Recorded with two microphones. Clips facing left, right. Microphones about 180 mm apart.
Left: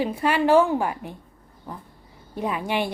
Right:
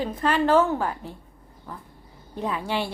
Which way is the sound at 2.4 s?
15° left (ahead or behind).